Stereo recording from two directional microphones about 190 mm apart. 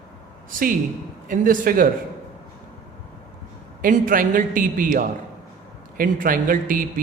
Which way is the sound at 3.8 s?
45° right (ahead or behind).